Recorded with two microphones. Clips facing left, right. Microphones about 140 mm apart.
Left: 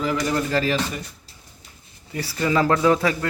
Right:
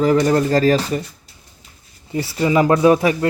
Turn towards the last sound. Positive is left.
turn(degrees=-20)  # may be behind; listen again after turning